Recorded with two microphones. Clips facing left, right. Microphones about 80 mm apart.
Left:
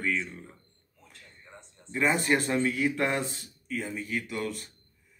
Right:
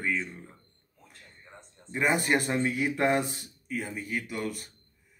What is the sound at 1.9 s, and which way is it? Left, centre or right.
Speech, centre.